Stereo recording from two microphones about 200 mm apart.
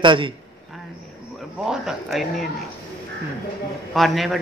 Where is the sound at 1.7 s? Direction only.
Centre (ahead or behind).